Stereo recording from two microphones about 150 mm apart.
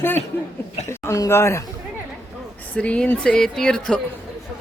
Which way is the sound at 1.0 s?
20° left (ahead or behind).